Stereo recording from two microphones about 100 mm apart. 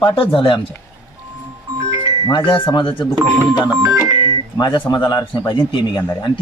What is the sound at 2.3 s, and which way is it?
Speech, 50° left (ahead or behind).